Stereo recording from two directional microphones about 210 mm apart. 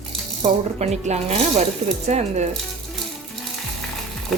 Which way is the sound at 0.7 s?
30° right (ahead or behind).